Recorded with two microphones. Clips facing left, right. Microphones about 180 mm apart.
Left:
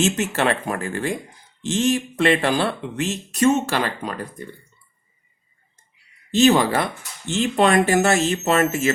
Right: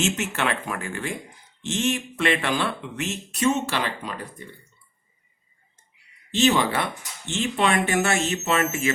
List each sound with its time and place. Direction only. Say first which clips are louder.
0.0 s speech: left 5 dB; 35° left (ahead or behind)
3.4 s speech: left 5 dB; 45° left (ahead or behind)
6.3 s speech: left 5 dB; 40° left (ahead or behind)